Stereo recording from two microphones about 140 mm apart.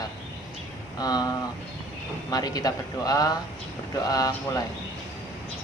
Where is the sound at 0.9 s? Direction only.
30° left (ahead or behind).